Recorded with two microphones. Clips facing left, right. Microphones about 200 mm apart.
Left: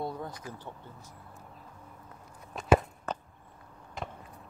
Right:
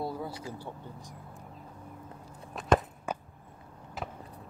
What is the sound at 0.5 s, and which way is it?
Speech, 10° right (ahead or behind).